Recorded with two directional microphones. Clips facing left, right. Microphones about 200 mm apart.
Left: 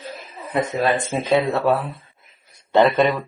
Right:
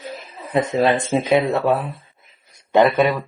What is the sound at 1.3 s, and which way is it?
Speech, 15° right (ahead or behind).